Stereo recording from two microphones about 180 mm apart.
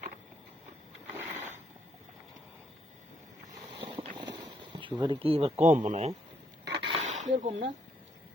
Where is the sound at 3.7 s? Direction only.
30° right (ahead or behind).